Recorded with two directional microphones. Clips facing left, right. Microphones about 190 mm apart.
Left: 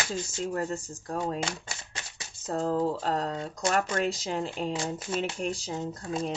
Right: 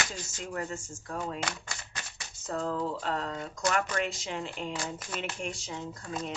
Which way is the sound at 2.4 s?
35° left (ahead or behind).